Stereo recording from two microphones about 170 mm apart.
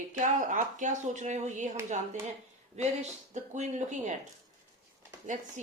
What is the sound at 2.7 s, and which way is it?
Speech, 45° right (ahead or behind).